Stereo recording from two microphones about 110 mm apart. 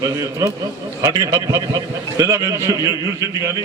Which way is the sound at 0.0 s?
30° right (ahead or behind).